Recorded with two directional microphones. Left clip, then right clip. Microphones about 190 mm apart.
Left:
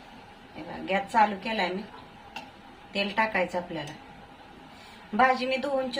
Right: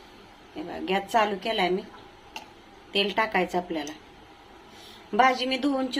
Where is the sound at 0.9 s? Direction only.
55° right (ahead or behind).